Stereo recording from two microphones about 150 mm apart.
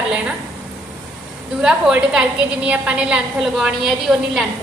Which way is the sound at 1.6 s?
5° right (ahead or behind).